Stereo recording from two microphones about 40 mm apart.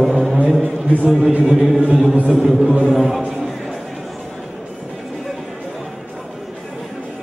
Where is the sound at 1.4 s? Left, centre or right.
Centre.